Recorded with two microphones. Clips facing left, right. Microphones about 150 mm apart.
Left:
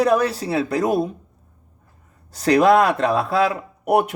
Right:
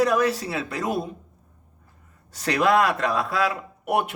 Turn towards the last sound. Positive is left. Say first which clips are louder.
# left 6 dB
turn(degrees=35)  # may be behind; listen again after turning